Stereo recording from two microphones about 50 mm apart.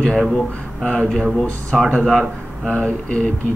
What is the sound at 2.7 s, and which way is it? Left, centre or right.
Speech, left.